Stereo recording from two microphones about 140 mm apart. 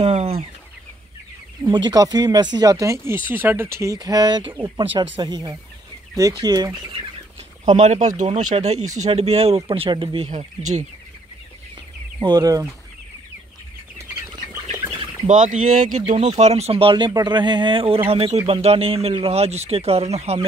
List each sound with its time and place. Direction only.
0.0 s speech: 50° right (ahead or behind)
1.7 s a man's voice: 30° right (ahead or behind)
7.6 s a man's voice: 55° right (ahead or behind)
10.3 s speech: 60° right (ahead or behind)
12.2 s speech: 30° right (ahead or behind)
15.2 s speech: 65° right (ahead or behind)
16.3 s a man's voice: 50° right (ahead or behind)